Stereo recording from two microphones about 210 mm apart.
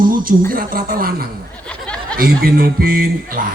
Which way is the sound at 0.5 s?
40° right (ahead or behind).